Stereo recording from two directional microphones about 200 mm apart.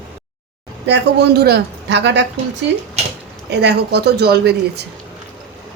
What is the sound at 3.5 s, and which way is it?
A man's voice, 55° right (ahead or behind).